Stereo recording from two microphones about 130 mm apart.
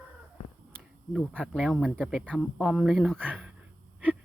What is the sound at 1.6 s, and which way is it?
Speech, centre (ahead or behind).